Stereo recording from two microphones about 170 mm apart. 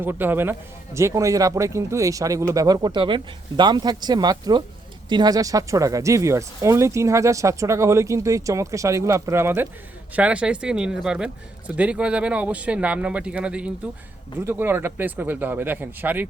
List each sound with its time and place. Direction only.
0.0 s speech: 10° right (ahead or behind)